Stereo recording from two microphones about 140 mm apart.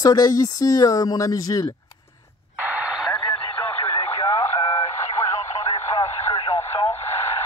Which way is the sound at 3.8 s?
25° left (ahead or behind).